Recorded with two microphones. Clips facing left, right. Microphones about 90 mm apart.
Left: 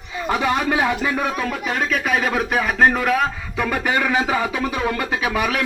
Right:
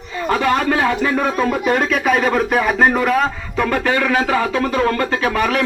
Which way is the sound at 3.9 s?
15° left (ahead or behind).